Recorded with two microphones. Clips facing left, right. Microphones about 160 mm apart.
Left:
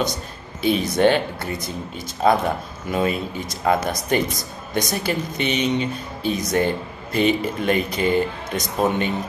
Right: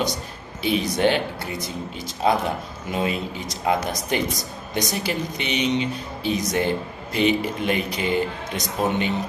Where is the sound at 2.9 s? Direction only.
20° right (ahead or behind).